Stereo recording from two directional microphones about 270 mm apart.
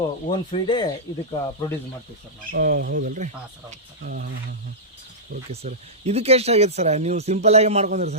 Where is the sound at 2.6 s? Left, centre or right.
Right.